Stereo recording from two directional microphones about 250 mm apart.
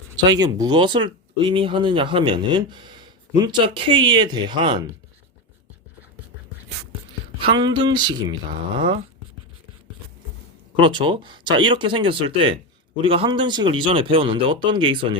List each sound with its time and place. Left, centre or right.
0.3 s speech: centre
7.3 s speech: centre
10.8 s speech: centre